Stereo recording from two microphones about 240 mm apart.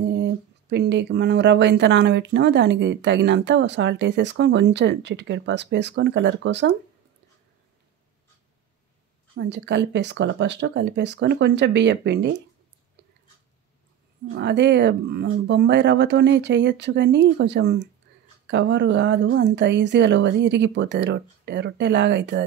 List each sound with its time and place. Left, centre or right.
0.1 s speech: right
9.3 s speech: right
14.3 s speech: right